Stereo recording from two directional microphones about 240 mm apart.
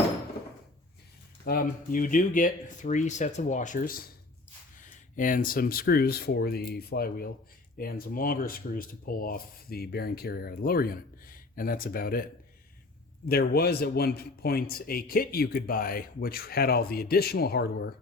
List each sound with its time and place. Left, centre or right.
1.5 s a man's voice: left